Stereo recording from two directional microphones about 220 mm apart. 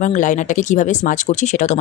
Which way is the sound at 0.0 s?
35° left (ahead or behind).